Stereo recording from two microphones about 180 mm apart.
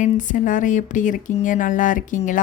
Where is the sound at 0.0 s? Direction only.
45° left (ahead or behind).